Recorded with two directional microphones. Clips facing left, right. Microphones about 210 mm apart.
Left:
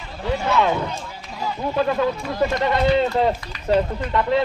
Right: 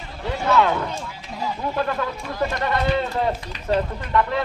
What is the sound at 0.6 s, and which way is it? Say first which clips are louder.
Speech: even; 20° left (ahead or behind).